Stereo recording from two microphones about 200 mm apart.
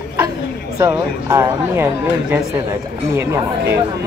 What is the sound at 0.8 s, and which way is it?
Speech, 15° right (ahead or behind).